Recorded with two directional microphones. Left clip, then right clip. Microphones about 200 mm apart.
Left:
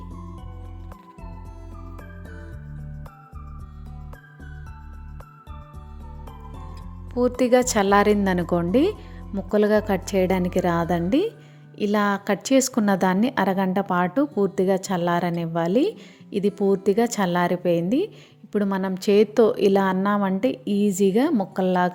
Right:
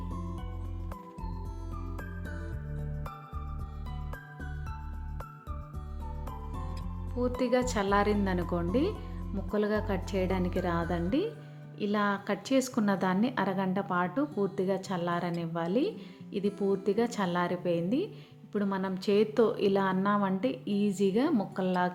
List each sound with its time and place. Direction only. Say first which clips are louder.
0.1 s music: even; centre (ahead or behind)
7.2 s a woman's voice: left 10 dB; 40° left (ahead or behind)